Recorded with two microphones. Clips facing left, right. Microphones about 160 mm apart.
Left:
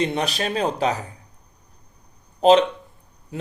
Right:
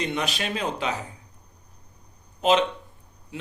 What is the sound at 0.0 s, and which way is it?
Speech, 35° left (ahead or behind).